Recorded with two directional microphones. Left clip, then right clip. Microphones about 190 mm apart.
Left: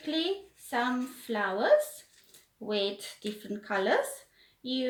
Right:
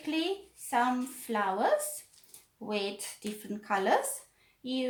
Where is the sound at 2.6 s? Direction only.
45° right (ahead or behind).